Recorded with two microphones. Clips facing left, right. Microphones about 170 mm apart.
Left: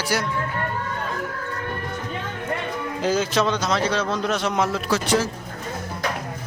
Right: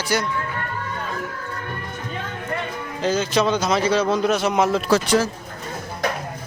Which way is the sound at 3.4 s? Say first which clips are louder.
Right 2 dB; 5° right (ahead or behind).